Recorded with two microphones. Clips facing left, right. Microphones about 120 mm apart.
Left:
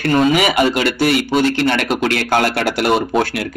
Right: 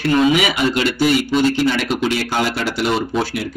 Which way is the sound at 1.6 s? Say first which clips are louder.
Left 1 dB; 60° left (ahead or behind).